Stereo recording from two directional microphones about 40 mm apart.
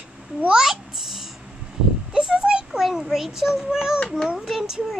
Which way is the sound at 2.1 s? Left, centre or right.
Centre.